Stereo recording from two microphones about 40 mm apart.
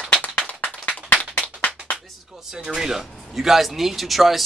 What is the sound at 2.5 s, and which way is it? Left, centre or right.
Speech, centre.